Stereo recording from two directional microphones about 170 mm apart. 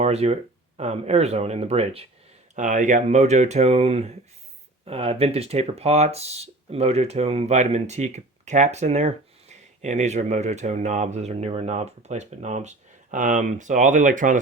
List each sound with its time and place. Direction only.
0.0 s speech: 40° right (ahead or behind)
2.6 s speech: 45° right (ahead or behind)